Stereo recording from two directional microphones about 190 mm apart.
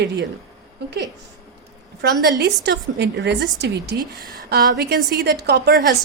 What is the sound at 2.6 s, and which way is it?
A woman's voice, 65° right (ahead or behind).